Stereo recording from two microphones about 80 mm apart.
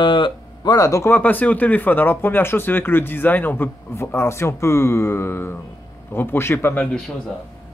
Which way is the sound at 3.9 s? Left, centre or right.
Left.